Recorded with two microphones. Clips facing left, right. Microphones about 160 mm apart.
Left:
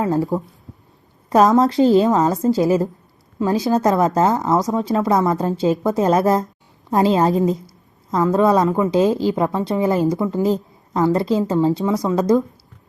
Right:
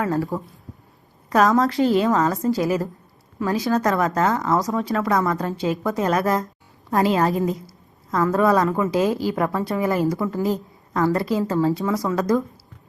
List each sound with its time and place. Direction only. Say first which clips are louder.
0.0 s a woman's voice: left 4 dB; 20° left (ahead or behind)
1.5 s a woman's voice: left 5 dB; 25° left (ahead or behind)